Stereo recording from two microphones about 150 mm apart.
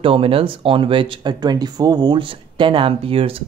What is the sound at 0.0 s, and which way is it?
Speech, 40° right (ahead or behind).